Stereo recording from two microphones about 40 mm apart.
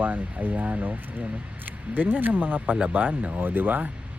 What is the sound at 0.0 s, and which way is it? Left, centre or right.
Speech, right.